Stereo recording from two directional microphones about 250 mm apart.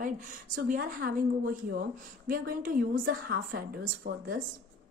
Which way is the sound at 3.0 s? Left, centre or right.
Right.